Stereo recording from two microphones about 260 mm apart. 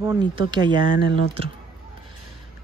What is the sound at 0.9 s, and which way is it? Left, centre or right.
Speech, left.